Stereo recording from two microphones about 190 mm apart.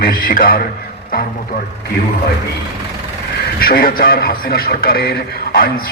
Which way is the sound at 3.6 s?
50° left (ahead or behind).